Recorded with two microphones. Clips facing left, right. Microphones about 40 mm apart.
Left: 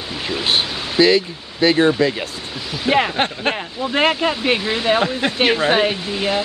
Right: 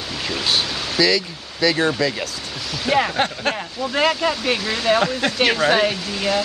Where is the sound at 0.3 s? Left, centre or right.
Left.